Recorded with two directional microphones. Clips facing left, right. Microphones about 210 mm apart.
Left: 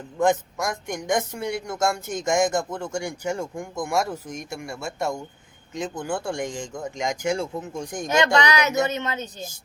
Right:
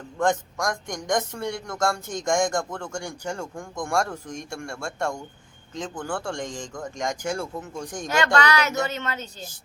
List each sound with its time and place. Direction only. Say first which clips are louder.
0.2 s speech: left 2 dB; 5° left (ahead or behind)
8.0 s speech: left 2 dB; 20° left (ahead or behind)